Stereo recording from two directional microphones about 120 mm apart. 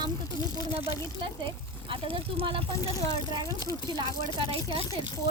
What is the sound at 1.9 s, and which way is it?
Speech, 50° right (ahead or behind).